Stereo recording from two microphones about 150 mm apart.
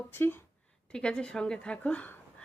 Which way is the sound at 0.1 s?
15° left (ahead or behind).